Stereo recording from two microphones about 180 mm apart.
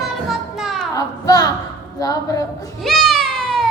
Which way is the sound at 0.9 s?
20° left (ahead or behind).